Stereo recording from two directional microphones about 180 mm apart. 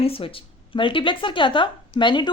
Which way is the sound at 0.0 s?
30° left (ahead or behind).